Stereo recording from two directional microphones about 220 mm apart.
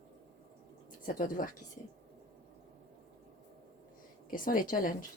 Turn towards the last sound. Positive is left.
turn(degrees=40)  # may be behind; listen again after turning